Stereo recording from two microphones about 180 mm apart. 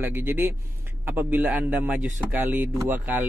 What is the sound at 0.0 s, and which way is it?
Speech, 10° right (ahead or behind).